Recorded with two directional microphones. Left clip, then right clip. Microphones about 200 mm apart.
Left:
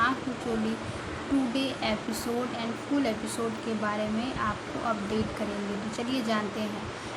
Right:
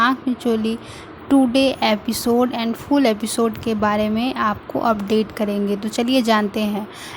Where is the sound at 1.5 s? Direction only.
50° right (ahead or behind).